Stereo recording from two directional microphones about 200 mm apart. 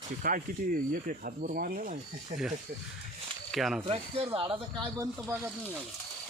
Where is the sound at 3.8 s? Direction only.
30° right (ahead or behind).